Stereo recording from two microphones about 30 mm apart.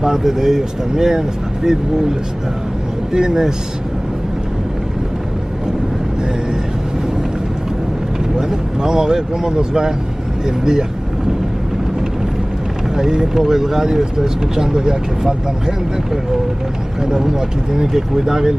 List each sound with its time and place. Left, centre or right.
0.0 s speech: centre
8.4 s speech: right
12.9 s speech: right
17.0 s speech: centre